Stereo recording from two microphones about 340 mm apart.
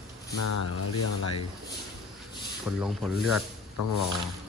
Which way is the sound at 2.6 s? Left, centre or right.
Centre.